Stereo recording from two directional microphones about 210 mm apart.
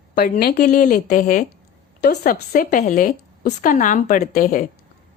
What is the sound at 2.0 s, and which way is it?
A woman's voice, 45° left (ahead or behind).